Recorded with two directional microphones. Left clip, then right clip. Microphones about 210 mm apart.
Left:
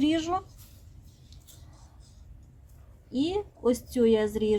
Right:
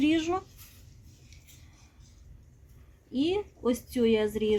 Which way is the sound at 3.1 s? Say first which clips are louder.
Even; 10° left (ahead or behind).